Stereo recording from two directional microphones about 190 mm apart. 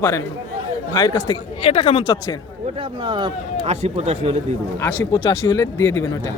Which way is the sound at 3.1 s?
25° right (ahead or behind).